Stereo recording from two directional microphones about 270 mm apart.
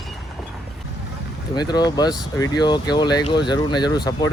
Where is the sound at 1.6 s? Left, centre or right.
Centre.